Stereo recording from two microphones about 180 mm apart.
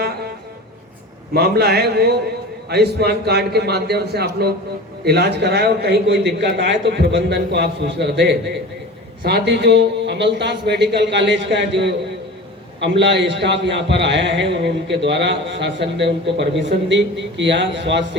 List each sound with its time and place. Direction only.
1.3 s a man's voice: 65° right (ahead or behind); by 18.2 s 80° right